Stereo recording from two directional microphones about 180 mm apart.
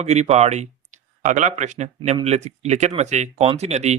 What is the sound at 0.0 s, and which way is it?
Speech, 40° right (ahead or behind).